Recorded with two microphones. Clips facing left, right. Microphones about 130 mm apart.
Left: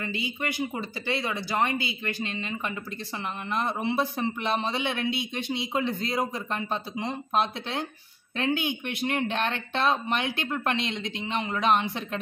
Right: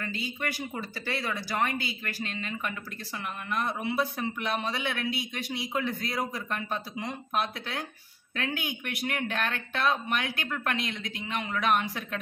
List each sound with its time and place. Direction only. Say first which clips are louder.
0.0 s a man's voice: left 2 dB; 15° left (ahead or behind)